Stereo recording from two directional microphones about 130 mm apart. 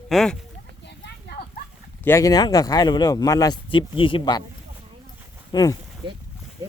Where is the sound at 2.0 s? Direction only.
25° left (ahead or behind).